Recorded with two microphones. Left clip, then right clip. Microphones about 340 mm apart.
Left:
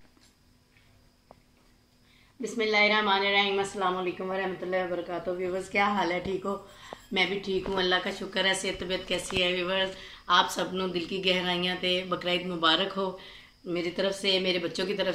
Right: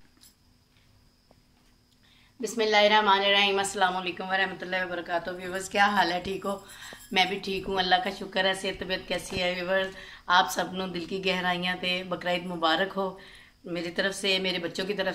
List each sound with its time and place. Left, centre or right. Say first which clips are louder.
2.4 s a woman's voice: right 2 dB; right